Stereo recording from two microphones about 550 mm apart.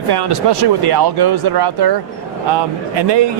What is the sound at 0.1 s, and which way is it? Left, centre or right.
Speech, right.